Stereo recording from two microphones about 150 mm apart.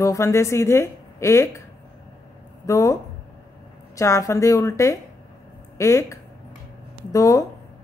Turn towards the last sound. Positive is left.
turn(degrees=25)  # may be behind; listen again after turning